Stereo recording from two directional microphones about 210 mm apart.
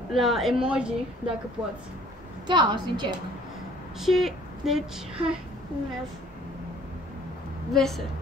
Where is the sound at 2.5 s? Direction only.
20° right (ahead or behind).